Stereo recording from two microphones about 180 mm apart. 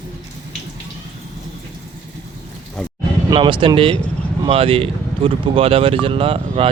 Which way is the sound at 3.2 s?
25° right (ahead or behind).